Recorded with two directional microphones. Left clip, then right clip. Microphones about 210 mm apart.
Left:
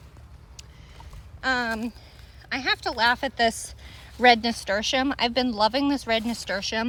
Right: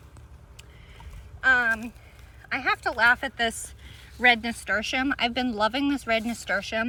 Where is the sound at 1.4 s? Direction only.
10° left (ahead or behind).